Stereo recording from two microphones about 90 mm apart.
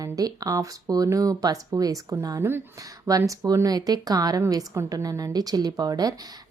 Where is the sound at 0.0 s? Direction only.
40° right (ahead or behind).